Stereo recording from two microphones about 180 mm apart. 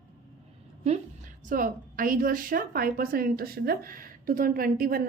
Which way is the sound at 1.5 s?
50° right (ahead or behind).